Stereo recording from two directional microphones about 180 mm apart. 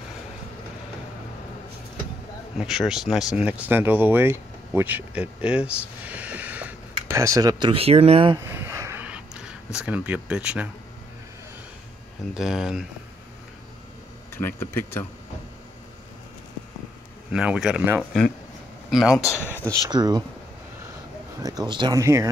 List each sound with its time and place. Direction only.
2.5 s speech: centre (ahead or behind); by 8.4 s 30° right (ahead or behind)
8.5 s a sound: 15° right (ahead or behind)
9.8 s speech: 5° right (ahead or behind)
12.4 s speech: centre (ahead or behind)
14.3 s speech: 15° left (ahead or behind)
17.3 s speech: 5° right (ahead or behind)
19.7 s speech: 20° right (ahead or behind)
21.4 s speech: 20° right (ahead or behind)